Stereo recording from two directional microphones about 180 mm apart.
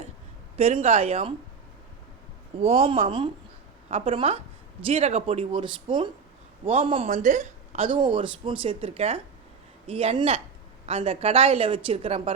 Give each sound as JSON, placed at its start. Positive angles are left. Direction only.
{"t": 0.5, "sound": "a woman's voice", "side_deg": -40}
{"t": 2.6, "sound": "a woman's voice", "side_deg": -35}
{"t": 7.9, "sound": "a woman's voice", "side_deg": -25}